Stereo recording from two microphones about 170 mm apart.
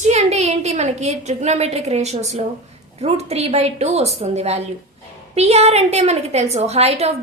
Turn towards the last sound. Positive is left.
turn(degrees=-35)  # may be behind; listen again after turning